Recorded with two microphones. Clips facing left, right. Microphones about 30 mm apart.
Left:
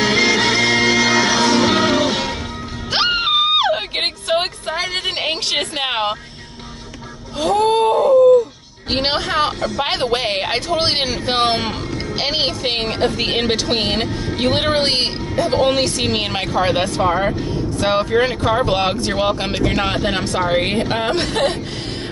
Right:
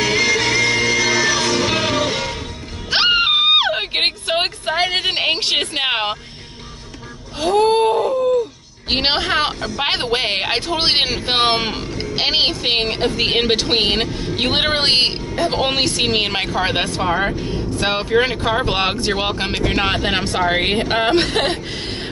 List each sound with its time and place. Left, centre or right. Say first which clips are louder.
0.0 s music: left 2 dB; left
1.7 s music: left 3 dB; centre
2.9 s music: right 2 dB; centre
3.4 s a sound: right 1 dB; centre
7.3 s a sound: even; centre
8.9 s a woman's voice: right 1 dB; right